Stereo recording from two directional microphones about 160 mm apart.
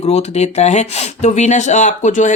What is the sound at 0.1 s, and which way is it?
Speech, 45° left (ahead or behind).